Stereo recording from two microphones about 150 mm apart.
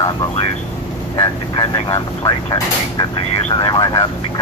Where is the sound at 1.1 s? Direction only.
35° left (ahead or behind).